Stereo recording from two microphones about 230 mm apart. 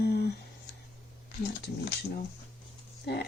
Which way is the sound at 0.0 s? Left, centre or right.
Left.